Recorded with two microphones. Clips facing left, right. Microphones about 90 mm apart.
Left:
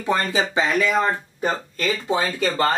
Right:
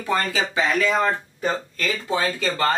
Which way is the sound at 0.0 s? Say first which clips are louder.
Left 2 dB; 20° left (ahead or behind).